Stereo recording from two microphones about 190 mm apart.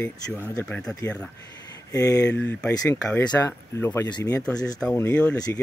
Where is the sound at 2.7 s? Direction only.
20° left (ahead or behind).